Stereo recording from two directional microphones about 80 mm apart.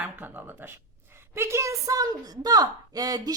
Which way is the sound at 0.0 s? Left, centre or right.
Right.